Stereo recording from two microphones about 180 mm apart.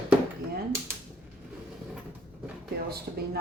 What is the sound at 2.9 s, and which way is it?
Speech, 60° right (ahead or behind).